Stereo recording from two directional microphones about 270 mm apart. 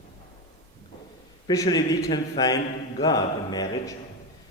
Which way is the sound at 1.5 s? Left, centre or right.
Centre.